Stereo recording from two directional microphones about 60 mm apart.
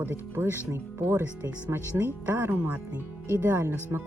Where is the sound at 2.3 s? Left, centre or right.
Right.